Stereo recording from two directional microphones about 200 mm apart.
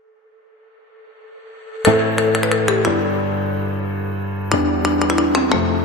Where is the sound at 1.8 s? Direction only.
Centre (ahead or behind).